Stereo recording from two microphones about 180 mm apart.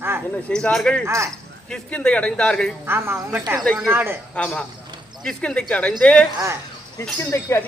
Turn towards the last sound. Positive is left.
turn(degrees=15)  # may be behind; listen again after turning